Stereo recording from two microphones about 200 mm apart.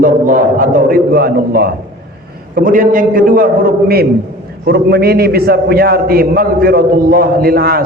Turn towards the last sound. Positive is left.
turn(degrees=-50)  # may be behind; listen again after turning